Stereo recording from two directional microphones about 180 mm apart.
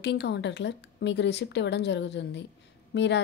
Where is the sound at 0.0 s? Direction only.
70° left (ahead or behind).